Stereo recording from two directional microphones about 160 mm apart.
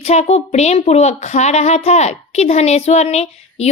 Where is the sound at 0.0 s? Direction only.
40° left (ahead or behind).